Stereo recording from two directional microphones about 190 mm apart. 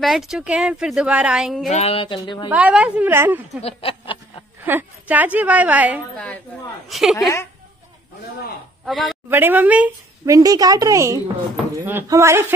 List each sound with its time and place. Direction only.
0.0 s a woman's voice: centre (ahead or behind)
1.7 s speech: 30° left (ahead or behind)
2.5 s speech: 5° right (ahead or behind)
3.6 s a sound: 30° left (ahead or behind)
4.6 s speech: 10° right (ahead or behind)
6.1 s a woman's voice: 5° left (ahead or behind)
7.2 s a woman's voice: 15° left (ahead or behind)
8.8 s speech: centre (ahead or behind)
9.3 s speech: 10° right (ahead or behind)